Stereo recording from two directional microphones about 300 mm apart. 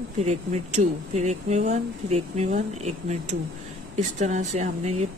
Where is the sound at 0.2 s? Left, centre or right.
Right.